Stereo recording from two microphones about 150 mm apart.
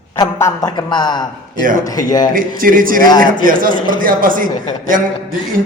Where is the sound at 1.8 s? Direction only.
25° left (ahead or behind).